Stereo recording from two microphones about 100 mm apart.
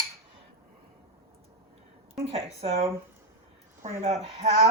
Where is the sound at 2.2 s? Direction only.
70° right (ahead or behind).